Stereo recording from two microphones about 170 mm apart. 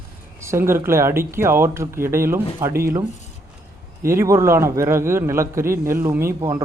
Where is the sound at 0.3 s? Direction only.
15° right (ahead or behind).